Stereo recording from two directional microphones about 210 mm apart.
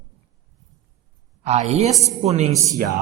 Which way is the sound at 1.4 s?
30° right (ahead or behind).